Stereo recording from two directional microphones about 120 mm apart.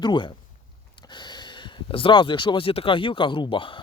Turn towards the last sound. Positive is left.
turn(degrees=45)  # may be behind; listen again after turning